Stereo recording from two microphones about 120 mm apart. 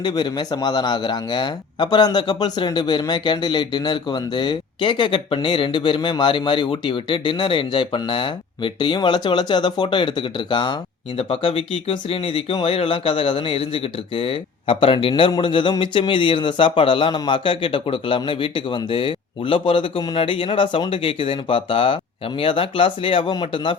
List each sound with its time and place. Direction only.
0.0 s a man's voice: 40° left (ahead or behind)
11.2 s speech: 55° left (ahead or behind)